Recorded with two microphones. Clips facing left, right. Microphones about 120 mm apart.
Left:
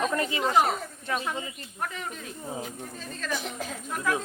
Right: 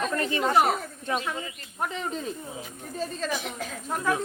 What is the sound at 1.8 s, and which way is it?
Speech, 25° right (ahead or behind).